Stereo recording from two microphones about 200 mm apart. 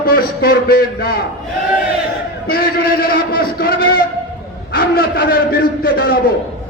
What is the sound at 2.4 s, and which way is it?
A man's voice, 45° left (ahead or behind).